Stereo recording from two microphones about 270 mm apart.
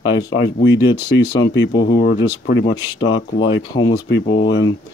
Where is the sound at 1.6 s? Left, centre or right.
Left.